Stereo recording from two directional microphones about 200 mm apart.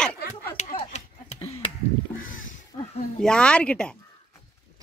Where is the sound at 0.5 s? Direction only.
35° left (ahead or behind).